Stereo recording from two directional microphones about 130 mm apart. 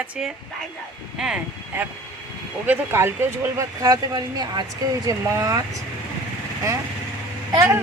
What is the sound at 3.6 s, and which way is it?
Speech, 30° right (ahead or behind).